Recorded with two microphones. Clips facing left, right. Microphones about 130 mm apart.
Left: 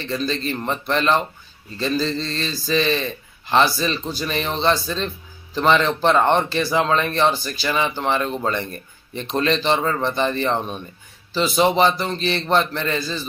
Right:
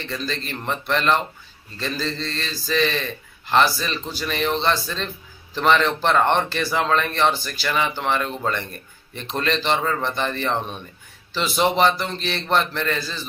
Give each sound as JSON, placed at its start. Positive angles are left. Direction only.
{"t": 0.1, "sound": "a man's voice", "side_deg": 15}